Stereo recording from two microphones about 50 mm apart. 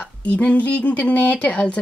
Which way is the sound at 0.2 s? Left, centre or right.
Left.